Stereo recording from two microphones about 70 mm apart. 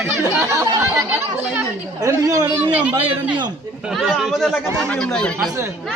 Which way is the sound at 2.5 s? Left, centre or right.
Right.